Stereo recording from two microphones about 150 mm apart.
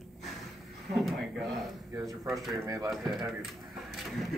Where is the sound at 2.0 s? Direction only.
Centre (ahead or behind).